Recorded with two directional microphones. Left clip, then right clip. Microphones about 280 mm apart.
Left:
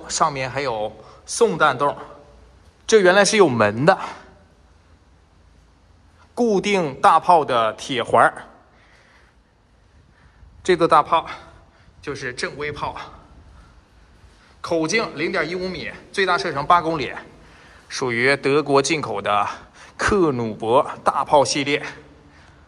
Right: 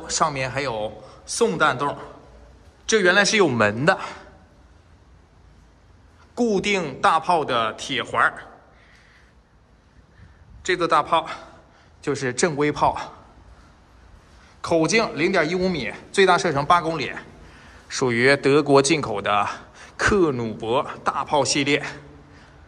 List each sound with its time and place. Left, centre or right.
0.0 s speech: centre
6.3 s speech: centre
10.6 s speech: centre
14.6 s speech: centre